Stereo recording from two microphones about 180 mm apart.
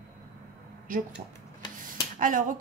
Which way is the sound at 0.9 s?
50° right (ahead or behind).